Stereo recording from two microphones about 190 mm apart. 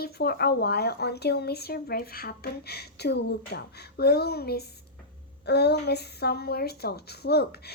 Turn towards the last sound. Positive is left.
turn(degrees=60)  # may be behind; listen again after turning